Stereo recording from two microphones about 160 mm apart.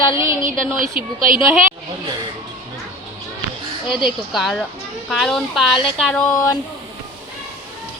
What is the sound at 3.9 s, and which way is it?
Speech, 30° left (ahead or behind).